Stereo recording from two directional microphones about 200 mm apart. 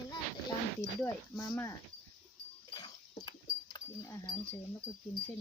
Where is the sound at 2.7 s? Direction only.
20° left (ahead or behind).